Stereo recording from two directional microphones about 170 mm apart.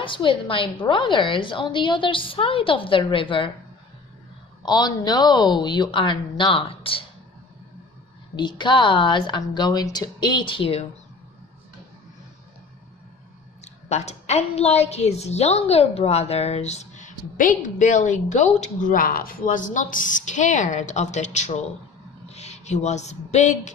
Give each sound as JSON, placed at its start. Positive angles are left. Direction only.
{"t": 0.0, "sound": "a woman's voice", "side_deg": 30}
{"t": 4.6, "sound": "a woman's voice", "side_deg": 25}
{"t": 8.4, "sound": "a woman's voice", "side_deg": 25}
{"t": 13.9, "sound": "a woman's voice", "side_deg": 40}